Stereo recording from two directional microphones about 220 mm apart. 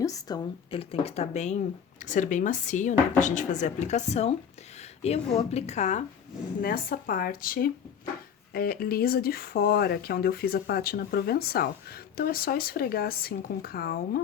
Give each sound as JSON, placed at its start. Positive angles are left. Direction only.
{"t": 0.0, "sound": "speech", "side_deg": 15}